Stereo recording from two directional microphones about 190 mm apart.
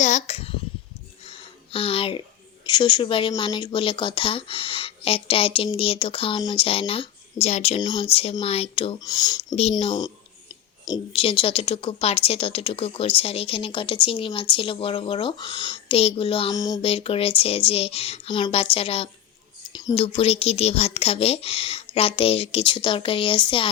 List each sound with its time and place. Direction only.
0.0 s a child's voice: 35° left (ahead or behind)
1.2 s a sound: 30° left (ahead or behind)
2.6 s speech: 25° left (ahead or behind)
9.6 s speech: 30° left (ahead or behind)
16.8 s speech: 30° left (ahead or behind)